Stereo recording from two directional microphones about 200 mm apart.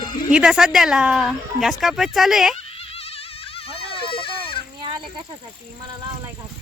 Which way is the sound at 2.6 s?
30° left (ahead or behind).